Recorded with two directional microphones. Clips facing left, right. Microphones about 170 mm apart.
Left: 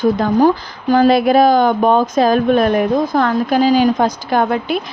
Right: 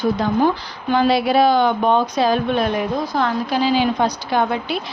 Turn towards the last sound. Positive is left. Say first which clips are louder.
# left 4 dB
turn(degrees=50)  # may be behind; listen again after turning